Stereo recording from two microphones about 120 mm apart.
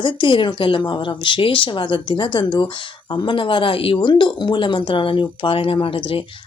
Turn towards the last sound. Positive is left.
turn(degrees=45)  # may be behind; listen again after turning